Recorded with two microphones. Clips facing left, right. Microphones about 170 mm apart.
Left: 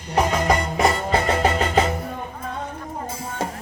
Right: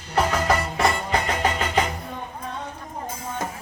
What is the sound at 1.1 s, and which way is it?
Music, 35° left (ahead or behind).